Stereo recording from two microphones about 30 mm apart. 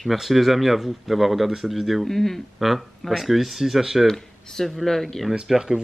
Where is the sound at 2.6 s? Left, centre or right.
Centre.